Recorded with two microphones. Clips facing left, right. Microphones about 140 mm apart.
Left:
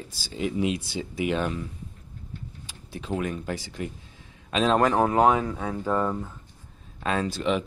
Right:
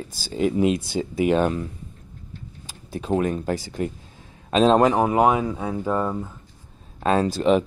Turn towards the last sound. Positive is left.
turn(degrees=-40)  # may be behind; listen again after turning